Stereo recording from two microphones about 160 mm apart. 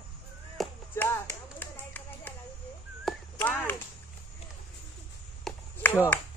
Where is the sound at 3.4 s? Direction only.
10° left (ahead or behind).